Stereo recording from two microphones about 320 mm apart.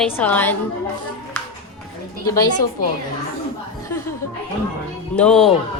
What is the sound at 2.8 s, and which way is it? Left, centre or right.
Speech, left.